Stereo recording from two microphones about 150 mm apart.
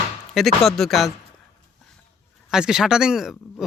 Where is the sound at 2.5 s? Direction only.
5° right (ahead or behind).